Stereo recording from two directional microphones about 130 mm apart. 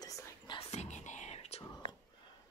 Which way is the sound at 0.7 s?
60° left (ahead or behind).